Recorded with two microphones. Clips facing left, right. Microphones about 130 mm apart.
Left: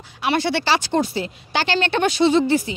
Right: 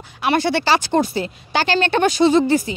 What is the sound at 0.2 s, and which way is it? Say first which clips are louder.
A woman's voice: right 2 dB; 50° right (ahead or behind).